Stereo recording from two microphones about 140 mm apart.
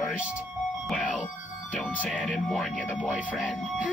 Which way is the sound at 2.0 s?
Centre (ahead or behind).